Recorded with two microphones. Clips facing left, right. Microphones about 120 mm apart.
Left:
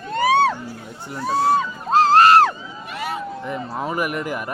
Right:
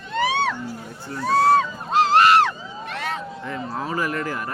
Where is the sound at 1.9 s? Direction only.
40° left (ahead or behind).